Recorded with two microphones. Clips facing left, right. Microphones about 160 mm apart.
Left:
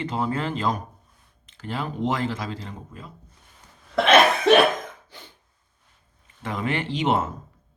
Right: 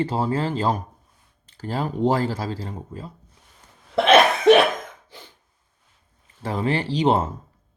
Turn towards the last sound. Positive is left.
turn(degrees=-30)  # may be behind; listen again after turning